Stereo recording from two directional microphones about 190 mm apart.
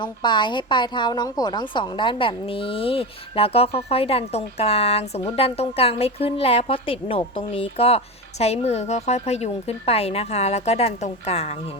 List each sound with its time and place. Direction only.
0.0 s a woman's voice: 25° left (ahead or behind)